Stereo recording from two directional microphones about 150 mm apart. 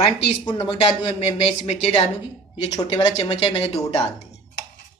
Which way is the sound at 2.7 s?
25° left (ahead or behind).